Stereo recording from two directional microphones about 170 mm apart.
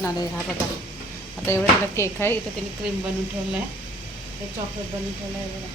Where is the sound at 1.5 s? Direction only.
15° left (ahead or behind).